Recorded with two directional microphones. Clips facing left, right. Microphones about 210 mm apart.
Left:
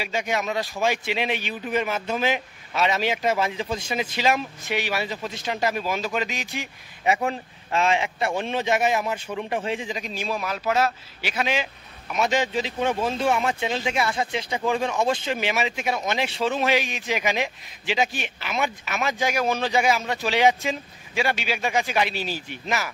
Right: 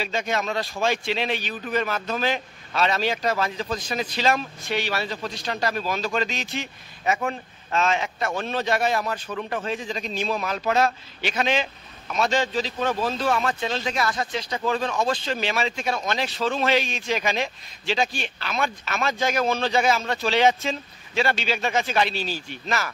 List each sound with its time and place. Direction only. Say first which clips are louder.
0.0 s a man's voice: even; 15° left (ahead or behind)